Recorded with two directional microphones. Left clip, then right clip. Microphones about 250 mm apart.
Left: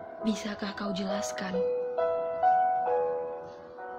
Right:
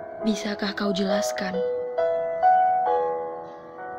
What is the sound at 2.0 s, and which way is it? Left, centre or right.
Music, right.